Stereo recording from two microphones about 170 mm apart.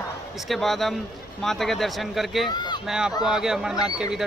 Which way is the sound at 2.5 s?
25° left (ahead or behind).